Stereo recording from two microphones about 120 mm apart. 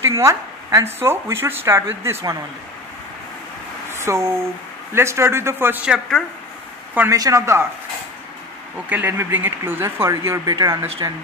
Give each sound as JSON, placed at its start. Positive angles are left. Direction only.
{"t": 0.0, "sound": "a woman's voice", "side_deg": -25}
{"t": 3.9, "sound": "speech", "side_deg": -25}
{"t": 7.1, "sound": "speech", "side_deg": -25}
{"t": 8.8, "sound": "speech", "side_deg": -15}